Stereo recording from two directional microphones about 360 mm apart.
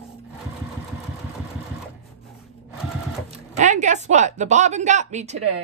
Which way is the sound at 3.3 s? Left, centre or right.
Centre.